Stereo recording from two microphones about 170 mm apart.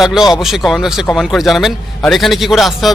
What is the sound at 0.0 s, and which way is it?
A man's voice, centre (ahead or behind).